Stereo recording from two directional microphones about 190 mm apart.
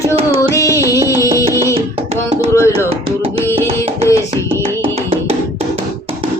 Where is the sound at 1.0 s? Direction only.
15° left (ahead or behind).